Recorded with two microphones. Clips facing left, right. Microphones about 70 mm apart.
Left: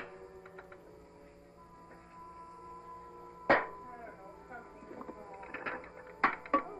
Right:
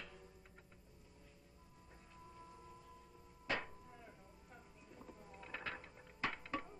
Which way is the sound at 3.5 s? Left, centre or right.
Left.